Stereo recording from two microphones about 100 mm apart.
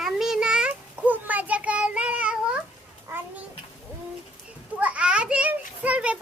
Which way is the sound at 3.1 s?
30° right (ahead or behind).